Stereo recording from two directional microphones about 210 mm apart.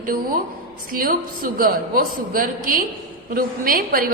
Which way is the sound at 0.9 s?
45° right (ahead or behind).